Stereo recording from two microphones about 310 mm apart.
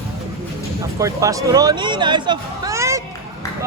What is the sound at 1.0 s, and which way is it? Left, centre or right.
Speech, centre.